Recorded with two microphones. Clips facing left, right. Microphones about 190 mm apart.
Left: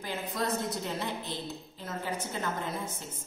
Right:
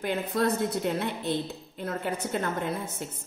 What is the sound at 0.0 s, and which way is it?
A woman's voice, 60° right (ahead or behind).